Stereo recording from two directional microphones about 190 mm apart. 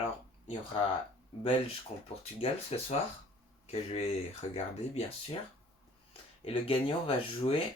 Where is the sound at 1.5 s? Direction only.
30° left (ahead or behind).